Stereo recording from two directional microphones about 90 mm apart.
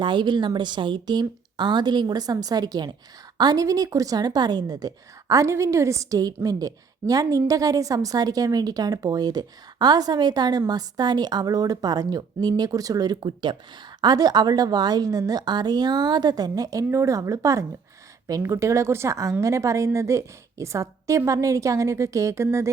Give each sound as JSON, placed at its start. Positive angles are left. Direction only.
{"t": 0.0, "sound": "a woman's voice", "side_deg": -60}
{"t": 14.0, "sound": "a woman's voice", "side_deg": -45}